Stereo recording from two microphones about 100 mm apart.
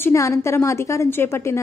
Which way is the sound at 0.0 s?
30° left (ahead or behind).